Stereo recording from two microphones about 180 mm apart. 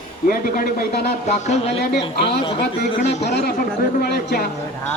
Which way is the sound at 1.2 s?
40° left (ahead or behind).